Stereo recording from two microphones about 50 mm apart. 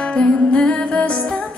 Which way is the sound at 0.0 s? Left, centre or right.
Left.